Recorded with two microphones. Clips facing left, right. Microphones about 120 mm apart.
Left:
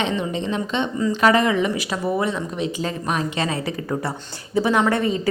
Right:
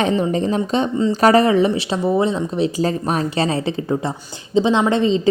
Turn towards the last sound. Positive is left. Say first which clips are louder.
# right 3 dB
turn(degrees=-20)  # may be behind; listen again after turning